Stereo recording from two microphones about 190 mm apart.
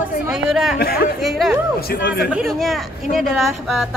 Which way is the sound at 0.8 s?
55° left (ahead or behind).